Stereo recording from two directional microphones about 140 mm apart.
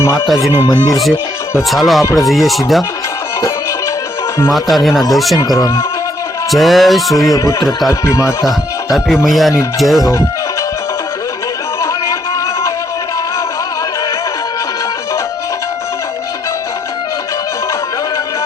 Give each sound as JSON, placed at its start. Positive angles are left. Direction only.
{"t": 0.6, "sound": "speech", "side_deg": 30}
{"t": 1.7, "sound": "speech", "side_deg": 0}
{"t": 4.5, "sound": "speech", "side_deg": 0}
{"t": 5.4, "sound": "speech", "side_deg": 25}
{"t": 6.5, "sound": "speech", "side_deg": 0}
{"t": 8.0, "sound": "speech", "side_deg": 20}
{"t": 8.9, "sound": "speech", "side_deg": 0}
{"t": 10.0, "sound": "speech", "side_deg": 20}